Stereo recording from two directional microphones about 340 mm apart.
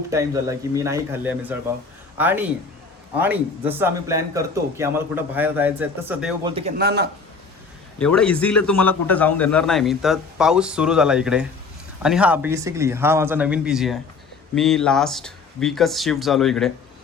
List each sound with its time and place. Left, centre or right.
0.1 s a man's voice: centre
6.4 s a man's voice: centre
6.7 s speech: right
7.9 s a man's voice: centre